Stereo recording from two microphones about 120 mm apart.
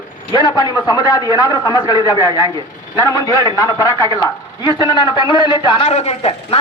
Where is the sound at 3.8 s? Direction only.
30° right (ahead or behind).